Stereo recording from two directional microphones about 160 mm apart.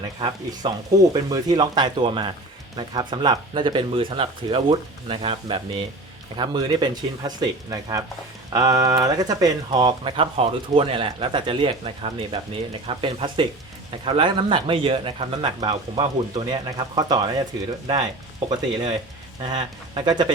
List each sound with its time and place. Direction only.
0.2 s speech: 25° right (ahead or behind)